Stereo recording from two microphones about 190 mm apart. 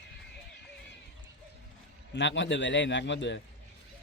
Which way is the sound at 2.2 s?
70° left (ahead or behind).